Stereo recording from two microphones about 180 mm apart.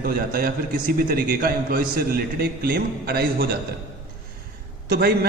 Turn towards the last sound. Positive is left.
turn(degrees=-60)  # may be behind; listen again after turning